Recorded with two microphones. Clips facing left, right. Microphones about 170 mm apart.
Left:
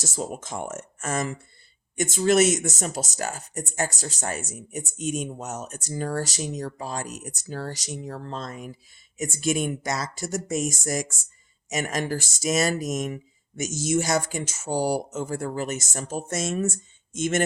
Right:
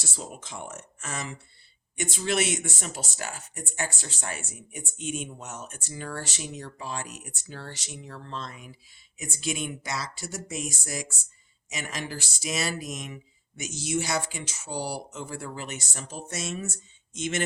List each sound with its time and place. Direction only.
0.0 s speech: 45° left (ahead or behind)